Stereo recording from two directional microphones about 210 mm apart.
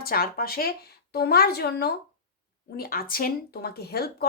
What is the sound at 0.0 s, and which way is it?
Speech, 45° left (ahead or behind).